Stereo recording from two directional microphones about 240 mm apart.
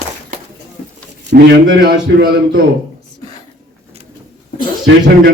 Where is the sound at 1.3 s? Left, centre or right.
Right.